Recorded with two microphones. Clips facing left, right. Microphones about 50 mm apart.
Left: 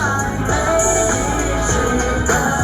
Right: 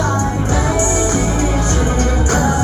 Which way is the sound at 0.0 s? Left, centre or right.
Left.